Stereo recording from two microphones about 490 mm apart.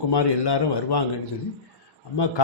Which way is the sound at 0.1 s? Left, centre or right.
Left.